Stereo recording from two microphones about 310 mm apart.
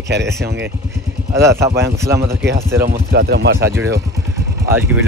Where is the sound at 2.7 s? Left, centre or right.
Right.